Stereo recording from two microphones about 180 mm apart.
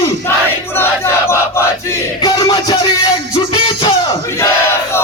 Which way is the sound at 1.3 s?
15° left (ahead or behind).